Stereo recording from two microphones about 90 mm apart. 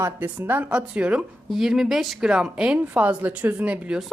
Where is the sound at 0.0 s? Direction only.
25° right (ahead or behind).